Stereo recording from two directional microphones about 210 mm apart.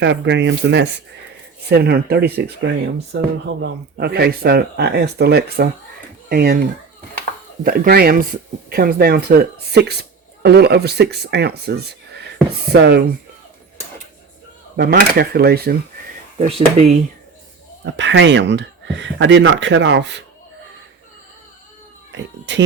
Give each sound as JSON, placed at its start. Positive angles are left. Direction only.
{"t": 0.0, "sound": "speech", "side_deg": -55}
{"t": 7.6, "sound": "speech", "side_deg": -45}
{"t": 14.8, "sound": "speech", "side_deg": -45}
{"t": 16.4, "sound": "speech", "side_deg": -30}
{"t": 17.9, "sound": "speech", "side_deg": -60}